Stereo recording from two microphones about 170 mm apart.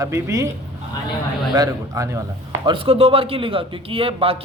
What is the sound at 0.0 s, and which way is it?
Speech, 20° right (ahead or behind).